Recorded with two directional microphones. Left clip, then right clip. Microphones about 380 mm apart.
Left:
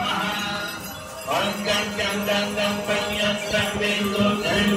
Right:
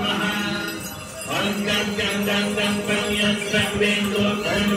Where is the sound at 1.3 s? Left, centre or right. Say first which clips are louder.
Even; left.